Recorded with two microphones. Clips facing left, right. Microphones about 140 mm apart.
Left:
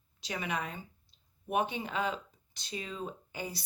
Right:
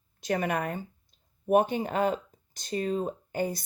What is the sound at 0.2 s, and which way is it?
Speech, 50° right (ahead or behind).